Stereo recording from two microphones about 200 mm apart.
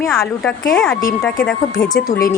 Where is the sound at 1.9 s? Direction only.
45° left (ahead or behind).